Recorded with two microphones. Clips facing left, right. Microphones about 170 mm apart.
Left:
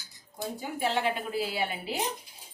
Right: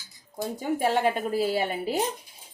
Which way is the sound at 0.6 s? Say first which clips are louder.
Right 6 dB; 45° right (ahead or behind).